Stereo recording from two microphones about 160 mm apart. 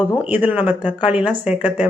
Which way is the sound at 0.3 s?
10° right (ahead or behind).